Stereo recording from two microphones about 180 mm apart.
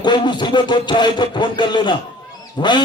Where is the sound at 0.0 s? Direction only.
25° left (ahead or behind).